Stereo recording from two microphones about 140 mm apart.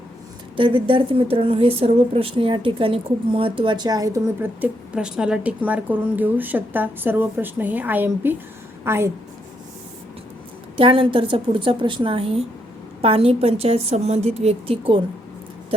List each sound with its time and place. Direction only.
0.5 s speech: 40° right (ahead or behind)
4.4 s a woman's voice: 10° right (ahead or behind)
10.8 s a woman's voice: 40° right (ahead or behind)